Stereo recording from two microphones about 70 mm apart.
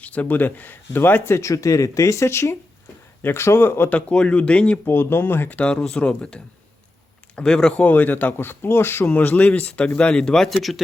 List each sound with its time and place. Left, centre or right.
0.0 s speech: left
3.8 s speech: centre
4.9 s speech: left
5.5 s speech: centre; by 9.1 s left
9.1 s speech: left; by 10.8 s centre